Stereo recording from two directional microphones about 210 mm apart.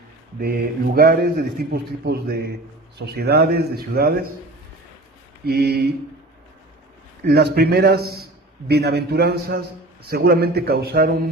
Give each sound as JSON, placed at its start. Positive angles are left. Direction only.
{"t": 0.3, "sound": "a man's voice", "side_deg": -45}
{"t": 5.5, "sound": "a man's voice", "side_deg": -50}
{"t": 7.3, "sound": "a man's voice", "side_deg": -50}